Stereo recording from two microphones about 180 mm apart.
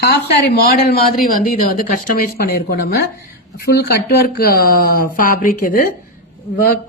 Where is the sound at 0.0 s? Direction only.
60° left (ahead or behind).